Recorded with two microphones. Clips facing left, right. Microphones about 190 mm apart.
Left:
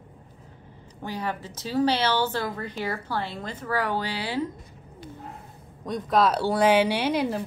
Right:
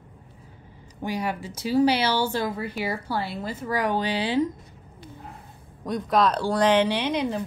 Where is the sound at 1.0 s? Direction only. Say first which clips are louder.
Right 3 dB; 10° right (ahead or behind).